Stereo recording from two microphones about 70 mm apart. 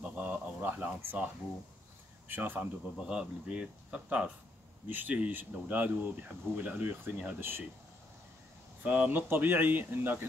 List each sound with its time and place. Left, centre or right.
0.0 s a sound: centre
2.2 s speech: right
3.0 s speech: centre
4.8 s speech: right
8.8 s speech: right